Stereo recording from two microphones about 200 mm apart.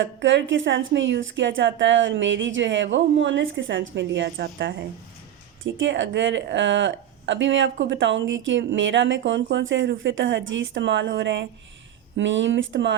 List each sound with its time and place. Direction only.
0.0 s a woman's voice: 65° right (ahead or behind)